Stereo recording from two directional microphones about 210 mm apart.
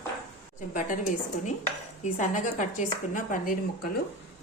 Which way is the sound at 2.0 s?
35° left (ahead or behind).